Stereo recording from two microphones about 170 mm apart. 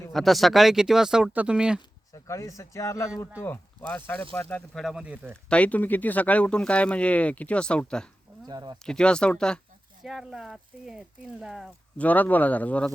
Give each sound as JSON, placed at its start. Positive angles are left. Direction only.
{"t": 0.1, "sound": "speech", "side_deg": 0}
{"t": 2.1, "sound": "speech", "side_deg": 15}
{"t": 5.5, "sound": "speech", "side_deg": 10}
{"t": 8.4, "sound": "speech", "side_deg": -25}
{"t": 8.8, "sound": "speech", "side_deg": 5}
{"t": 11.9, "sound": "speech", "side_deg": 10}